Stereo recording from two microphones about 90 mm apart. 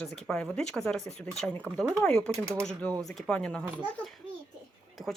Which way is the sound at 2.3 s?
30° right (ahead or behind).